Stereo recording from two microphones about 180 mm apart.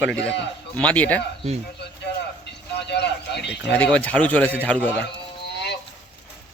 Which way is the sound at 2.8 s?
70° left (ahead or behind).